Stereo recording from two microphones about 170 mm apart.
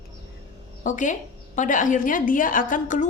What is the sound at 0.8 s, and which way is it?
A woman's voice, 50° left (ahead or behind).